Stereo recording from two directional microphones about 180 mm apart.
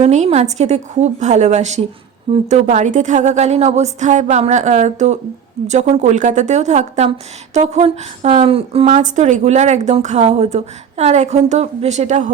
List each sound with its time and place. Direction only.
0.0 s a woman's voice: 40° right (ahead or behind)